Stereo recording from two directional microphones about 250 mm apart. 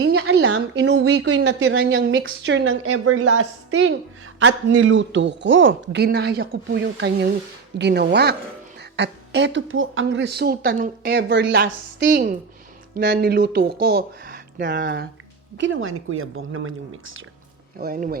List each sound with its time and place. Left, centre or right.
0.1 s a sound: right
0.4 s speech: right
1.1 s speech: right
17.7 s speech: right